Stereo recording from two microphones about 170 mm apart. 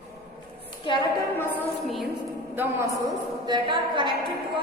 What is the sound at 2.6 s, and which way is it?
A woman's voice, 15° right (ahead or behind).